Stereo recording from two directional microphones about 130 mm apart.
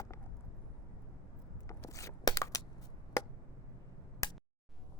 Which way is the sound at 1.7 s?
25° left (ahead or behind).